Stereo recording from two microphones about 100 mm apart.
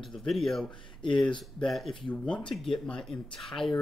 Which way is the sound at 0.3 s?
Centre (ahead or behind).